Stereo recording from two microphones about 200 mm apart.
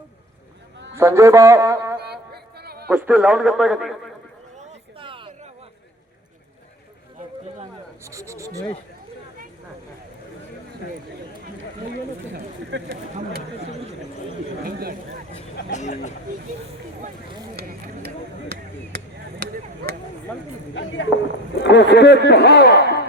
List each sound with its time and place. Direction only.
0.9 s a man's voice: 15° right (ahead or behind)
2.0 s a sound: 55° right (ahead or behind)
2.9 s a man's voice: 5° right (ahead or behind)
4.6 s a sound: 25° right (ahead or behind)
8.0 s a man's voice: 15° right (ahead or behind)
12.7 s speech: 65° right (ahead or behind)
14.6 s speech: 50° right (ahead or behind)
15.7 s speech: 35° left (ahead or behind)
17.6 s a sound: 50° right (ahead or behind)
18.5 s chop: 55° right (ahead or behind)
20.7 s a man's voice: 65° left (ahead or behind)